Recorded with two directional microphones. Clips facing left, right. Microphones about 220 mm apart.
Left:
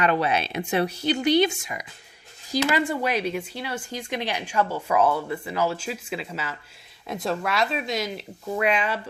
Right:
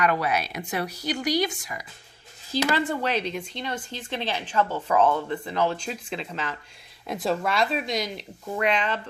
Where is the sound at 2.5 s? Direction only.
10° left (ahead or behind).